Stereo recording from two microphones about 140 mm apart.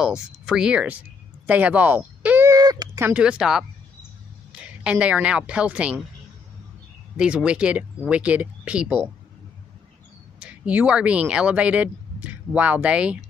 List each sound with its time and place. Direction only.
0.0 s speech: 5° right (ahead or behind)
2.5 s a sound: 30° right (ahead or behind)
3.0 s speech: 10° right (ahead or behind)
7.2 s speech: 5° right (ahead or behind)
10.4 s speech: 10° right (ahead or behind)